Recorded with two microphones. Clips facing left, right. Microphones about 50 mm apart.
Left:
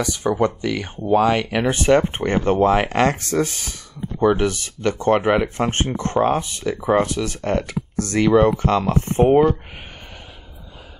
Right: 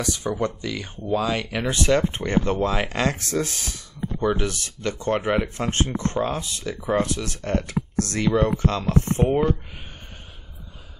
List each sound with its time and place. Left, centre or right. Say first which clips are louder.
0.0 s speech: left 5 dB; left